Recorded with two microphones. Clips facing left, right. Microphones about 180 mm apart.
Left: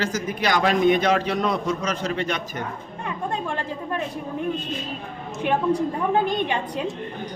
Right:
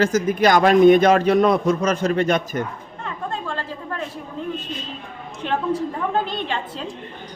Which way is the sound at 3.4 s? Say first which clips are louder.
Left 1 dB; 15° left (ahead or behind).